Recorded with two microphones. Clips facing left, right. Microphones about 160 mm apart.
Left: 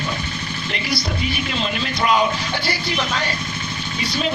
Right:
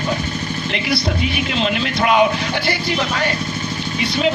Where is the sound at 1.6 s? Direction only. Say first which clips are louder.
Right 3 dB; 60° right (ahead or behind).